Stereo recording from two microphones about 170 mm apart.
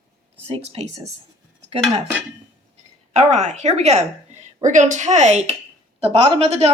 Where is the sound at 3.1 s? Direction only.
40° right (ahead or behind).